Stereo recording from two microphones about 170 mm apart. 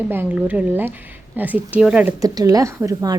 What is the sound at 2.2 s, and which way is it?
Speech, 20° right (ahead or behind).